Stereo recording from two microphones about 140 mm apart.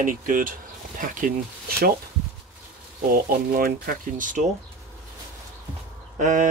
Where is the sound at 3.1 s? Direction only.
90° right; by 4.4 s 70° right (ahead or behind).